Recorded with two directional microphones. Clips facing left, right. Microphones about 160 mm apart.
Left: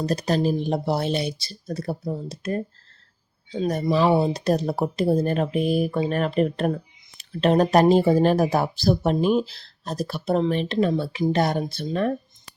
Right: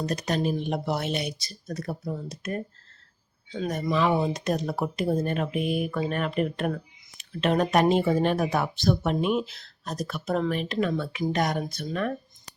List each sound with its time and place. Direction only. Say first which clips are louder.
0.0 s speech: left 4 dB; 35° left (ahead or behind)